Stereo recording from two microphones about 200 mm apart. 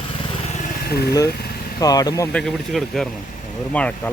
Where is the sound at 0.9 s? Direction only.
50° left (ahead or behind).